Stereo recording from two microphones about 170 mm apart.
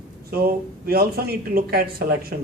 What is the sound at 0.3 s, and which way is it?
Speech, 60° right (ahead or behind).